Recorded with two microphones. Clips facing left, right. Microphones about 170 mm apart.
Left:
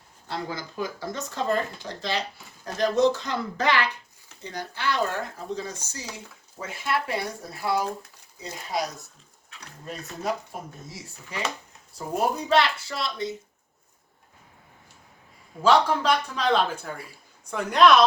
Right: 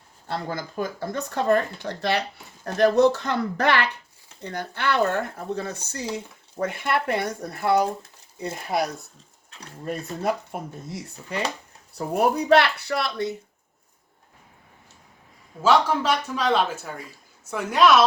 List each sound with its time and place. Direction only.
0.3 s speech: 50° right (ahead or behind)
15.6 s speech: 5° right (ahead or behind)